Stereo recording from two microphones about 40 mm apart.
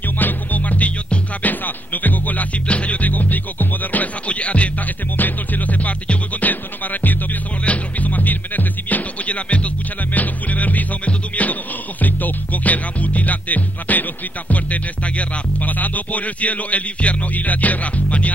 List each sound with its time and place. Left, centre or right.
0.2 s music: left
2.7 s music: left
3.1 s music: left
5.1 s music: left
7.6 s music: left